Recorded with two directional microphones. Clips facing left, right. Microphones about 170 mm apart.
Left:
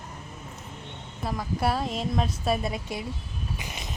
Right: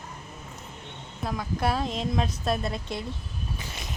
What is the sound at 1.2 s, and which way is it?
A woman's voice, 5° left (ahead or behind).